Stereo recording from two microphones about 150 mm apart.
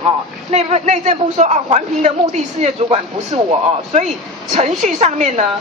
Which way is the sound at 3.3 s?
40° right (ahead or behind).